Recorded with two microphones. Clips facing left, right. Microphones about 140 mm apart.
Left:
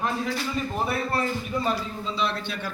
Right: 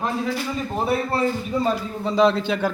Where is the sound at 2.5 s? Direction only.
90° right.